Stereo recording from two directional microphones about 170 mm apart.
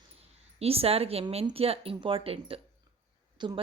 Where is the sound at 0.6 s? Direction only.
35° right (ahead or behind).